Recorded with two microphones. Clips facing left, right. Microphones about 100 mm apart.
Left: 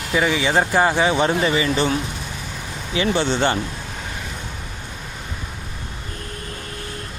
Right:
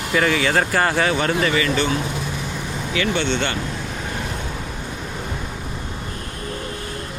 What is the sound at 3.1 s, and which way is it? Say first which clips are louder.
Speech: left 5 dB; 35° left (ahead or behind).